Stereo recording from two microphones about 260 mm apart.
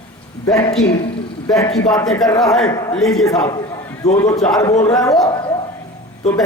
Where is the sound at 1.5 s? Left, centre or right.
Centre.